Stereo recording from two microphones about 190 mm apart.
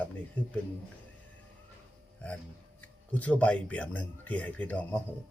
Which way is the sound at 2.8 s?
5° left (ahead or behind).